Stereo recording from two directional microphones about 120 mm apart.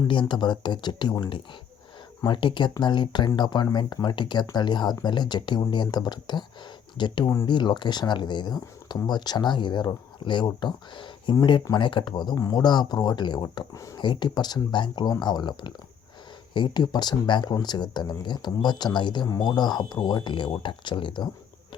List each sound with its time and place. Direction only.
0.1 s speech: 40° left (ahead or behind)
13.7 s speech: 25° left (ahead or behind)
14.0 s speech: 40° left (ahead or behind)